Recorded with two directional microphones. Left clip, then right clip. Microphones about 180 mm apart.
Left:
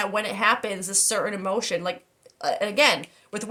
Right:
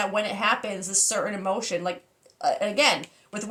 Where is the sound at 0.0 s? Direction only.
45° left (ahead or behind).